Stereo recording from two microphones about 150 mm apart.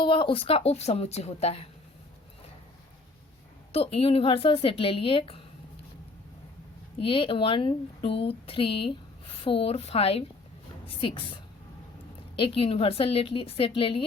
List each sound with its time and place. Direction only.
0.0 s a woman's voice: 35° left (ahead or behind)
3.7 s speech: 40° left (ahead or behind)
7.0 s speech: 35° left (ahead or behind)
12.4 s speech: 40° left (ahead or behind)